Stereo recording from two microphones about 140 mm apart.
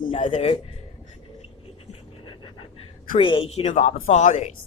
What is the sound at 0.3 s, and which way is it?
Speech, 40° left (ahead or behind).